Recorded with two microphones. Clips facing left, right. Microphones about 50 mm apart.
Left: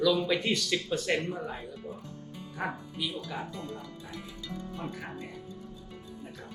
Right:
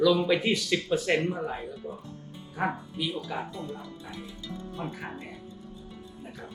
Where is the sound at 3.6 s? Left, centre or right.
Right.